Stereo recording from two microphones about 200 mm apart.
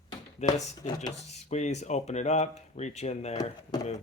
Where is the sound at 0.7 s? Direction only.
20° left (ahead or behind).